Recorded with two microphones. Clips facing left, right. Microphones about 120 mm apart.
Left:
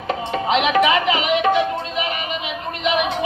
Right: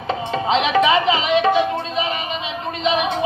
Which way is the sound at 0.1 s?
30° right (ahead or behind).